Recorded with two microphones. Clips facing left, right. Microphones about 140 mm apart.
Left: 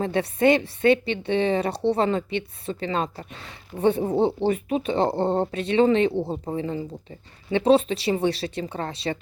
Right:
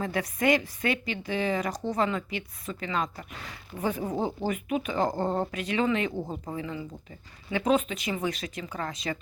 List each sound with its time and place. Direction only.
0.0 s a woman's voice: 30° left (ahead or behind)